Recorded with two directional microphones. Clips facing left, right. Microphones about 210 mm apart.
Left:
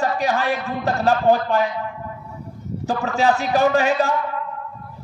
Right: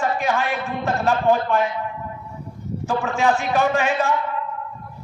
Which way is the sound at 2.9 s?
35° left (ahead or behind).